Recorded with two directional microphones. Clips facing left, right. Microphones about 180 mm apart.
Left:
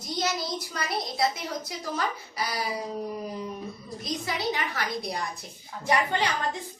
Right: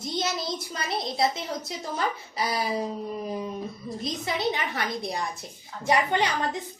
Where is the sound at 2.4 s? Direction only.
25° right (ahead or behind).